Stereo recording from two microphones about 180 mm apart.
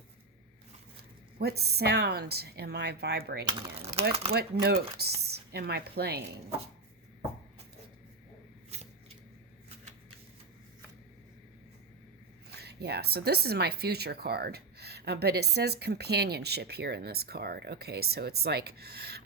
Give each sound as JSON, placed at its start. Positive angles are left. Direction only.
{"t": 1.4, "sound": "speech", "side_deg": -65}
{"t": 3.4, "sound": "speech", "side_deg": -35}
{"t": 4.6, "sound": "speech", "side_deg": -60}
{"t": 8.7, "sound": "a sound", "side_deg": -35}
{"t": 12.5, "sound": "speech", "side_deg": -65}